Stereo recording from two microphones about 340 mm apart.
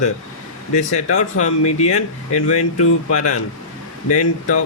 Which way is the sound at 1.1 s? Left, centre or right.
Left.